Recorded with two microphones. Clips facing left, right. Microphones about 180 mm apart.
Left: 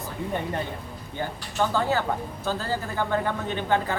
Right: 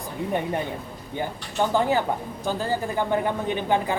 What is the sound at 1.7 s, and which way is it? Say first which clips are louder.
Speech: right 5 dB; 15° right (ahead or behind).